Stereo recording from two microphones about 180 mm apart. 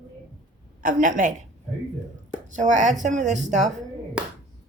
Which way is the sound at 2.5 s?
45° right (ahead or behind).